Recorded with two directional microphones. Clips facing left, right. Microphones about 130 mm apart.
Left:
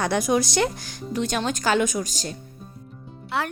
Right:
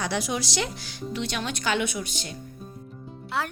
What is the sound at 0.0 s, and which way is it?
A woman's voice, 50° left (ahead or behind).